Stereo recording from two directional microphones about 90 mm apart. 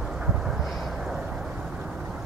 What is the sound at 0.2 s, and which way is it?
Vehicle, 5° right (ahead or behind).